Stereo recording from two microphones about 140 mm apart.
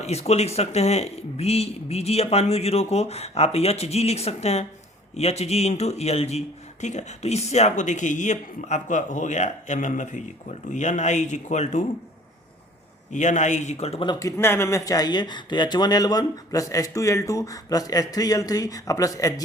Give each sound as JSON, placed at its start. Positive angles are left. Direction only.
{"t": 0.0, "sound": "speech", "side_deg": 50}
{"t": 13.1, "sound": "speech", "side_deg": 60}
{"t": 14.0, "sound": "speech", "side_deg": 30}